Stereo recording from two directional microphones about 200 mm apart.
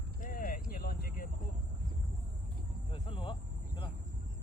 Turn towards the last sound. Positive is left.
turn(degrees=25)  # may be behind; listen again after turning